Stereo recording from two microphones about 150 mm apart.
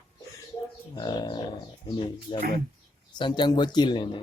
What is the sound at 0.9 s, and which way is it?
Speech, 25° left (ahead or behind).